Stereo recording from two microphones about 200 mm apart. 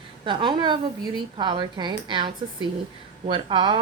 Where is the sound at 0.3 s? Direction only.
25° right (ahead or behind).